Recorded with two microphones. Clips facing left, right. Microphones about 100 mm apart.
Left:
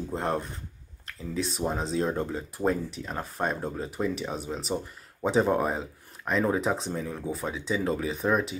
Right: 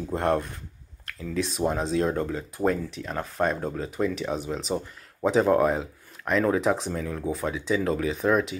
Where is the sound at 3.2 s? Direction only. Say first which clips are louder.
Right 4 dB; 5° left (ahead or behind).